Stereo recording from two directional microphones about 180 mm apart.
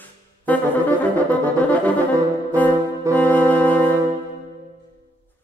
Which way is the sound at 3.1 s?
15° right (ahead or behind).